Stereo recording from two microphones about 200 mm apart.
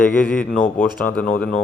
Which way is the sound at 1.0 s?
10° left (ahead or behind).